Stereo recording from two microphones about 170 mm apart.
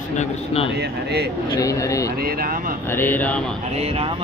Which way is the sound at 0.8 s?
75° right (ahead or behind).